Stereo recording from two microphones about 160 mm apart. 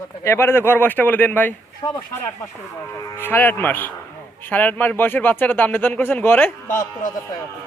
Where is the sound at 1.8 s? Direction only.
25° left (ahead or behind).